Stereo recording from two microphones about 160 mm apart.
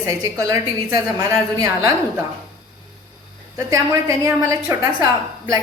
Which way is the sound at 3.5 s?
20° right (ahead or behind).